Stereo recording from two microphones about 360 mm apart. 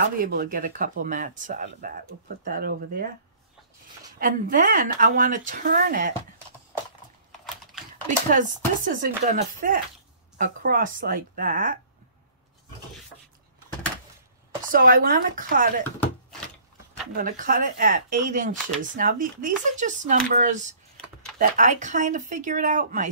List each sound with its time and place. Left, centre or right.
0.2 s speech: right
4.2 s speech: right
8.3 s speech: right
14.7 s speech: right
17.1 s speech: right